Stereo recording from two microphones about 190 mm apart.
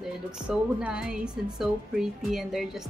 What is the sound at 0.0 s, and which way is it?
A woman's voice, 5° right (ahead or behind).